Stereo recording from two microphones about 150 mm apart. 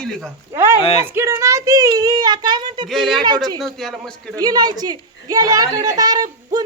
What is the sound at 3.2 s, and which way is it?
Speech, 30° right (ahead or behind).